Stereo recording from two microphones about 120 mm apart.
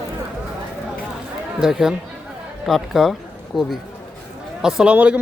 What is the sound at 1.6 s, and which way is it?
Speech, 5° right (ahead or behind).